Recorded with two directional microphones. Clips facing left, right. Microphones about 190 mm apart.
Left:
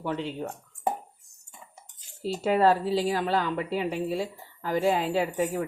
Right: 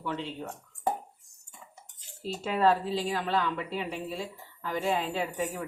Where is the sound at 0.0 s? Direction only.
40° left (ahead or behind).